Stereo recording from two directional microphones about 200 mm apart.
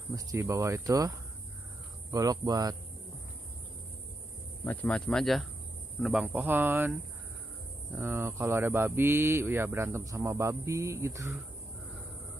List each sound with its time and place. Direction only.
0.1 s speech: 15° right (ahead or behind)
4.6 s speech: 5° left (ahead or behind); by 11.3 s 15° right (ahead or behind)